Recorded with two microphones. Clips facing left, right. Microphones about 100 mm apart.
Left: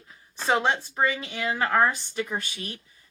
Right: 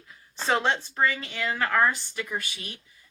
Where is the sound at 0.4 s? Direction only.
15° left (ahead or behind).